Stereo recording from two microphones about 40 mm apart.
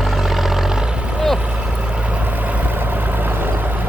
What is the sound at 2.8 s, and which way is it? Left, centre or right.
Vehicle, right.